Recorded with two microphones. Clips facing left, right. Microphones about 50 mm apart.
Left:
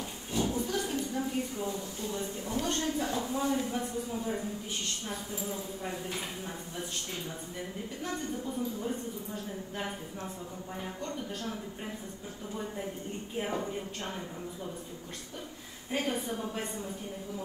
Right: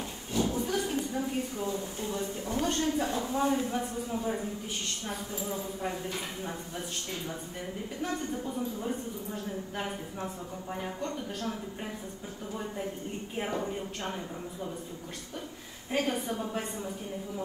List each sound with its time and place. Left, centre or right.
0.4 s a woman's voice: right
5.5 s a woman's voice: centre
8.0 s a woman's voice: right
11.0 s a woman's voice: right
13.4 s a woman's voice: centre
16.1 s a woman's voice: right
16.3 s a woman's voice: centre